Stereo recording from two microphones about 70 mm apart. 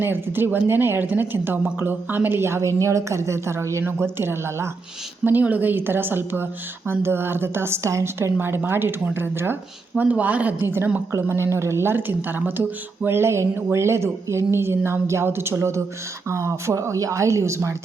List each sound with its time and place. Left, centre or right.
0.0 s a woman's voice: right
5.2 s a woman's voice: right
10.0 s speech: right
11.1 s a woman's voice: right